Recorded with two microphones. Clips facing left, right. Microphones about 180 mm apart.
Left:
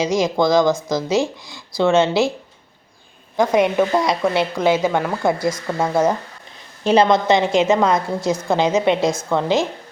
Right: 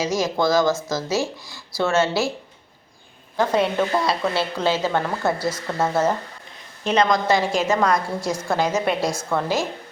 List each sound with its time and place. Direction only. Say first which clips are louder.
0.0 s speech: left 4 dB; 20° left (ahead or behind)
3.3 s speech: left 4 dB; 15° left (ahead or behind)
6.8 s a woman's voice: left 5 dB; 30° left (ahead or behind)